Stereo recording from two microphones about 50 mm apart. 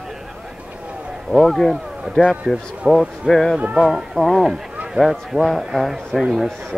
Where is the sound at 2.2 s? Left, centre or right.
Centre.